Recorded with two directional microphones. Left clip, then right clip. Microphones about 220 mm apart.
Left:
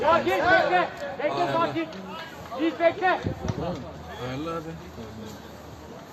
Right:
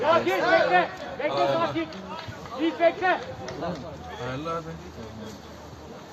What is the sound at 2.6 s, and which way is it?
Speech, 5° left (ahead or behind).